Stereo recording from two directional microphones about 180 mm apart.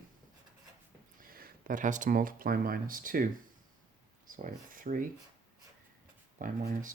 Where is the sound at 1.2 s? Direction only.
50° right (ahead or behind).